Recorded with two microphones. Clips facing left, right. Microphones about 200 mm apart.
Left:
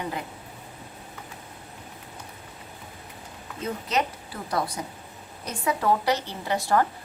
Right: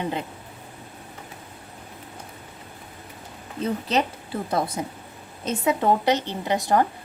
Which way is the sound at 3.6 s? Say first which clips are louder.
Right 4 dB; 30° right (ahead or behind).